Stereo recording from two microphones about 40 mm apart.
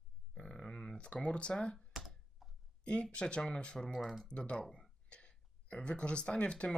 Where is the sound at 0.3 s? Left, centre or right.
Centre.